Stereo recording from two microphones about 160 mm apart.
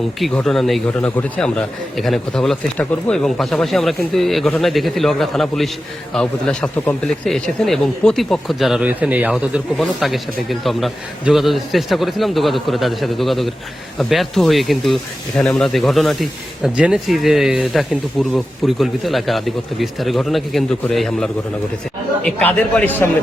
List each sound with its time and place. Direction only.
0.2 s a man's voice: 5° left (ahead or behind)